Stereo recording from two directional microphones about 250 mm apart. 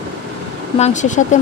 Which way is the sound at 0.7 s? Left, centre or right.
Left.